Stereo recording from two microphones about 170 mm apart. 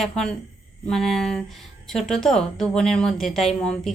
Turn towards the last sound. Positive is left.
turn(degrees=0)  # may be behind; listen again after turning